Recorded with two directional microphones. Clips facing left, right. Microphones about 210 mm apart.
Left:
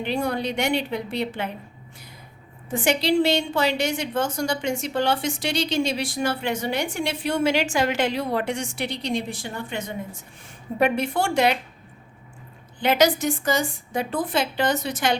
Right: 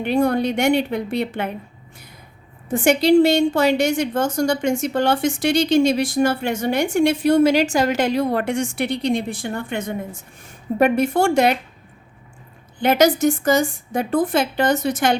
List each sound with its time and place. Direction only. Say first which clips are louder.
0.0 s a woman's voice: right 7 dB; 50° right (ahead or behind)
2.6 s a woman's voice: right 6 dB; 45° right (ahead or behind)
12.8 s a woman's voice: right 4 dB; 45° right (ahead or behind)